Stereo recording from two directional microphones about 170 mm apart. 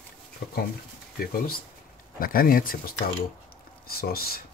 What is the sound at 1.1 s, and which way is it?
Speech, 60° left (ahead or behind).